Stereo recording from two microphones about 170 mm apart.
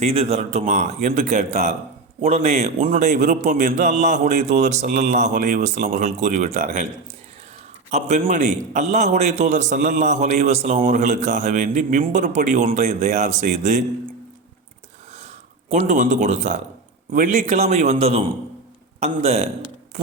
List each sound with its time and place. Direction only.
0.0 s a man's voice: 40° right (ahead or behind)
7.9 s a man's voice: 45° right (ahead or behind)
15.7 s a man's voice: 45° right (ahead or behind)